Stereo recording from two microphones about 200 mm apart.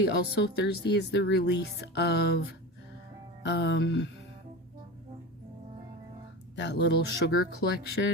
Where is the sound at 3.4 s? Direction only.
60° left (ahead or behind).